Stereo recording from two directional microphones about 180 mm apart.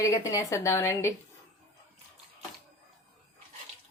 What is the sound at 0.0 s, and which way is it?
Speech, 20° left (ahead or behind).